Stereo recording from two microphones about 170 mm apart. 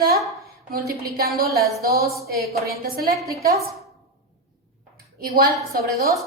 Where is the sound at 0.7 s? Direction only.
65° right (ahead or behind).